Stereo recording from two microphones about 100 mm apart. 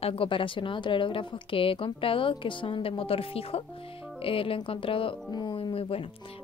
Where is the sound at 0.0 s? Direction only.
70° left (ahead or behind).